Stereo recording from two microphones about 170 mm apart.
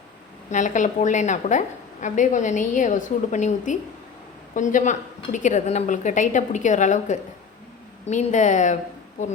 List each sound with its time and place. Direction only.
0.5 s a woman's voice: 45° left (ahead or behind)